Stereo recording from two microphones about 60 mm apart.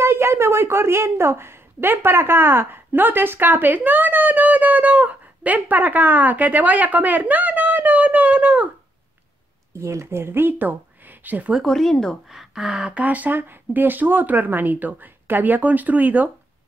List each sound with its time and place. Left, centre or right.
0.0 s a woman's voice: right
9.8 s speech: right
11.6 s speech: centre
12.3 s speech: centre
13.0 s speech: right